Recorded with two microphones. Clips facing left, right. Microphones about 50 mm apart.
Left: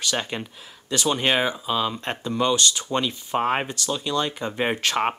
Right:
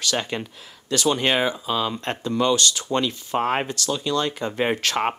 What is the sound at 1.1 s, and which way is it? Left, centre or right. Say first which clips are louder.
Speech: right 1 dB; centre.